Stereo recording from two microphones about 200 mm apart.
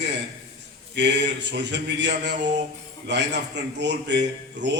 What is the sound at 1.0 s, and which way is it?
Speech, 60° right (ahead or behind).